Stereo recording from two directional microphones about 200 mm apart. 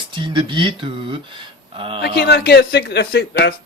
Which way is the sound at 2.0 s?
55° left (ahead or behind).